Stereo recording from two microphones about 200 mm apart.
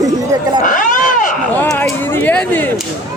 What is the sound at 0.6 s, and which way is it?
Wild animals, 40° left (ahead or behind).